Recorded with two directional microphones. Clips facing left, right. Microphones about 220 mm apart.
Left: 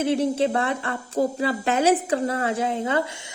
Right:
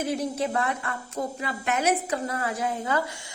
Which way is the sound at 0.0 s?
25° left (ahead or behind).